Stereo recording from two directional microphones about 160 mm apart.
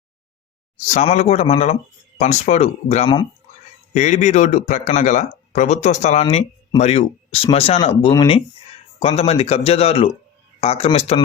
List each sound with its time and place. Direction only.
1.1 s speech: 45° left (ahead or behind)